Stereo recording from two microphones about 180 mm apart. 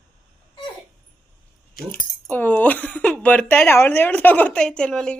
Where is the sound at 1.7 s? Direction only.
55° left (ahead or behind).